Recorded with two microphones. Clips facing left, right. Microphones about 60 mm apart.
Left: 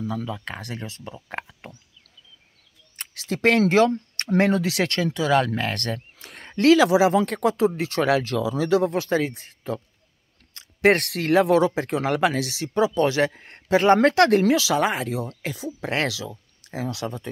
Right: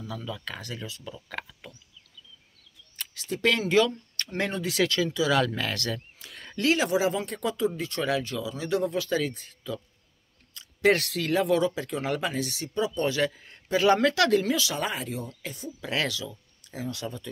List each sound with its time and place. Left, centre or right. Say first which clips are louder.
0.0 s speech: left 7 dB; left
0.6 s speech: left 3 dB; left
1.1 s a sound: left 4 dB; left
3.0 s a sound: left 1 dB; left
3.3 s speech: left 5 dB; left
4.5 s speech: left 4 dB; left
5.3 s speech: left 4 dB; left
6.1 s a sound: left 3 dB; left
6.6 s speech: left 8 dB; left
7.3 s speech: left 7 dB; left
8.9 s speech: left 4 dB; left
13.3 s speech: left 7 dB; left
14.4 s speech: left 8 dB; left
15.8 s speech: left 3 dB; left